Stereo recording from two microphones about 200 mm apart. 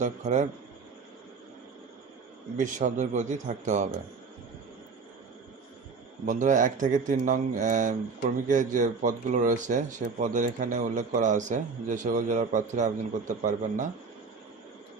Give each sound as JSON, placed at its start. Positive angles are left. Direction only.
{"t": 0.0, "sound": "speech", "side_deg": -40}
{"t": 2.6, "sound": "speech", "side_deg": -35}
{"t": 6.2, "sound": "speech", "side_deg": -40}